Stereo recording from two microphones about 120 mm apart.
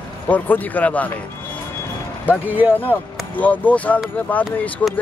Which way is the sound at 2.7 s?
15° left (ahead or behind).